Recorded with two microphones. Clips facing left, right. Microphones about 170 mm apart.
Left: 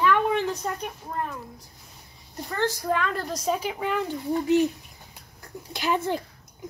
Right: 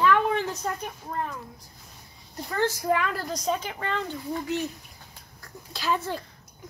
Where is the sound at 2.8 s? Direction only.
10° right (ahead or behind); by 4.1 s 10° left (ahead or behind).